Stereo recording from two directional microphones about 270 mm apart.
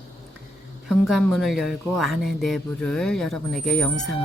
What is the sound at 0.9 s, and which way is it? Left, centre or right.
Speech, centre.